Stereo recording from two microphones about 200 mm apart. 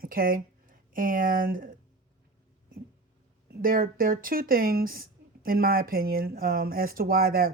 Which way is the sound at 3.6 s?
45° right (ahead or behind).